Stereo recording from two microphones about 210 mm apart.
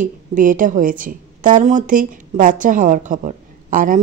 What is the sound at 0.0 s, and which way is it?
A woman's voice, 40° right (ahead or behind).